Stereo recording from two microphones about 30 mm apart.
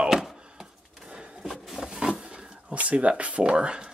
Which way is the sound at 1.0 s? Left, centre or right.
Right.